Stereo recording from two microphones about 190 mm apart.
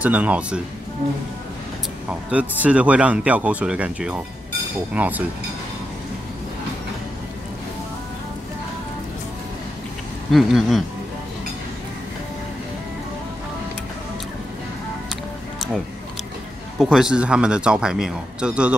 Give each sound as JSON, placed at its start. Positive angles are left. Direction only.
{"t": 0.0, "sound": "speech", "side_deg": -10}
{"t": 2.3, "sound": "speech", "side_deg": -5}
{"t": 10.3, "sound": "speech", "side_deg": 0}
{"t": 16.7, "sound": "speech", "side_deg": -5}